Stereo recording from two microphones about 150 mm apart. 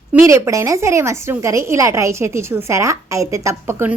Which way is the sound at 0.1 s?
15° right (ahead or behind).